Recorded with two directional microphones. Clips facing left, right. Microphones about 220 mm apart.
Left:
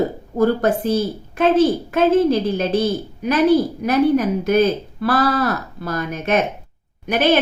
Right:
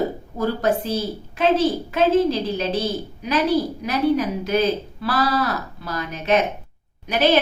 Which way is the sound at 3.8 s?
50° left (ahead or behind).